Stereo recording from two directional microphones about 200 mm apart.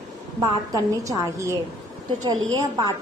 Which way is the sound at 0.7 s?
15° right (ahead or behind).